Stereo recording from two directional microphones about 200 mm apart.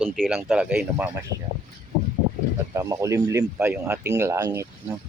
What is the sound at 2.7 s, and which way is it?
Speech, 15° right (ahead or behind).